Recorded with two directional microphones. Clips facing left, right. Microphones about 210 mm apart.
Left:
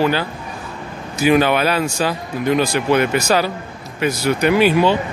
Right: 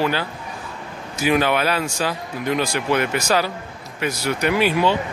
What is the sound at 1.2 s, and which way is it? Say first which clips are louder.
Speech: left 4 dB; 30° left (ahead or behind).